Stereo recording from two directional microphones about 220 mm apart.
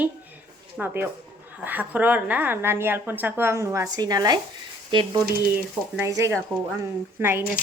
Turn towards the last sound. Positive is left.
turn(degrees=-10)  # may be behind; listen again after turning